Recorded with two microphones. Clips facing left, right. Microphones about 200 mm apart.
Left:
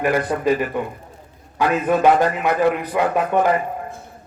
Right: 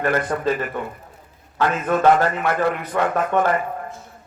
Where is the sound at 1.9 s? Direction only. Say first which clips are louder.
Left 1 dB; 15° left (ahead or behind).